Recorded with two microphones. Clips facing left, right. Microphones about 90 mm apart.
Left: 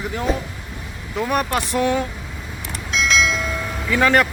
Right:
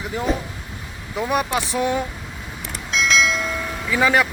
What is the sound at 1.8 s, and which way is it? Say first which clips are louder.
Speech: left 2 dB; 15° right (ahead or behind).